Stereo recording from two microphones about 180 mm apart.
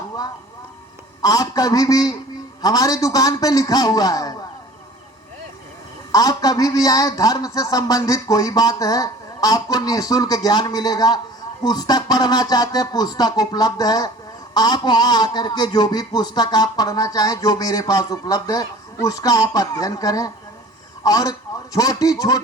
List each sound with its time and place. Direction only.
1.2 s a man's voice: 20° left (ahead or behind)
6.1 s a man's voice: 20° left (ahead or behind)